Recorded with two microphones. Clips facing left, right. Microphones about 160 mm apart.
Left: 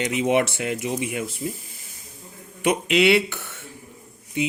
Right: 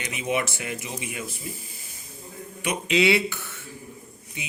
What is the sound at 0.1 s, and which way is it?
Speech, 70° left (ahead or behind).